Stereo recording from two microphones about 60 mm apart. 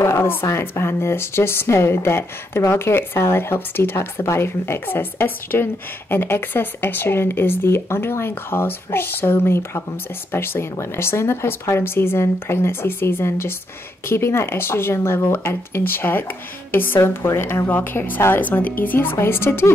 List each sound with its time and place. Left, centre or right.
0.0 s a sound: left
0.5 s speech: left
17.6 s speech: left